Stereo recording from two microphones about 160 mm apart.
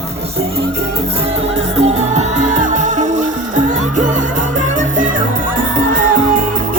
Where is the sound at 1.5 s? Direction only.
40° right (ahead or behind).